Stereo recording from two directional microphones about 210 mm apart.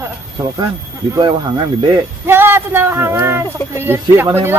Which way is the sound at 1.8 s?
15° right (ahead or behind).